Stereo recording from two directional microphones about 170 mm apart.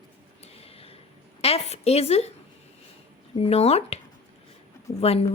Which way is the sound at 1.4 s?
35° left (ahead or behind).